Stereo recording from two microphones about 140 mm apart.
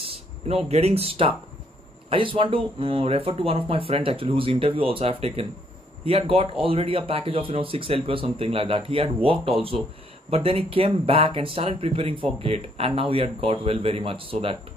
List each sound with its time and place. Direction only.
0.0 s speech: 45° right (ahead or behind)